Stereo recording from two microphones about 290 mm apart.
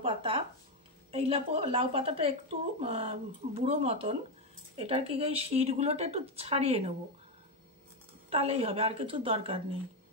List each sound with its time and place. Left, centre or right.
0.0 s a sound: centre
1.1 s speech: right
8.3 s speech: right